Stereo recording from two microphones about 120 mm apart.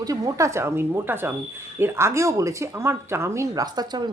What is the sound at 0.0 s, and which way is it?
Speech, 30° right (ahead or behind).